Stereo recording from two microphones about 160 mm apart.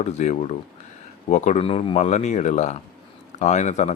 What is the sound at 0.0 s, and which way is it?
Speech, 45° left (ahead or behind).